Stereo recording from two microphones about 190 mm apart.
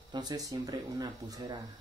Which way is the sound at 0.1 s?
20° right (ahead or behind).